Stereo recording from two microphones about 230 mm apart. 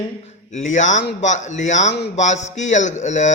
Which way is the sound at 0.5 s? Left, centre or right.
Left.